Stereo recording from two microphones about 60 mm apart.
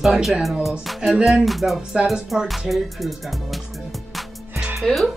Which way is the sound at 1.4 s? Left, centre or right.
Centre.